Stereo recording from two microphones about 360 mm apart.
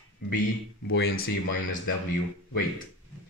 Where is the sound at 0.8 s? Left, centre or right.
Left.